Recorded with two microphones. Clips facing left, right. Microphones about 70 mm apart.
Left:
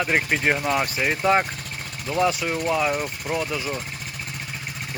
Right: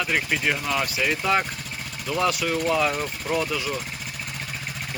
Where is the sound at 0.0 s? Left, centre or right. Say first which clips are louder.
Left 2 dB; left; by 3.6 s centre.